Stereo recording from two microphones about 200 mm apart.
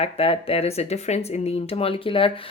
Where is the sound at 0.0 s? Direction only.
30° left (ahead or behind).